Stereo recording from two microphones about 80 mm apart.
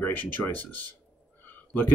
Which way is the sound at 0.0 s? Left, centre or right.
Left.